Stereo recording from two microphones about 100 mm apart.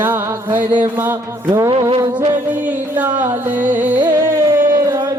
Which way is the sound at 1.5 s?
40° right (ahead or behind).